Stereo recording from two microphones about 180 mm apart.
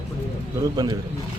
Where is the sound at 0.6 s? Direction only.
20° right (ahead or behind).